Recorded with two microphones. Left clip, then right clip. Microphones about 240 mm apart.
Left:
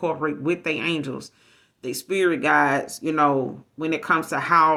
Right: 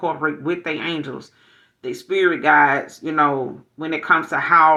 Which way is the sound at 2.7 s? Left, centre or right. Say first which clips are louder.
Right 2 dB; left.